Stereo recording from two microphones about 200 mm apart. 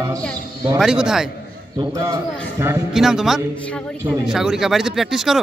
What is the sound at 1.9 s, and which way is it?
Speech, 15° right (ahead or behind).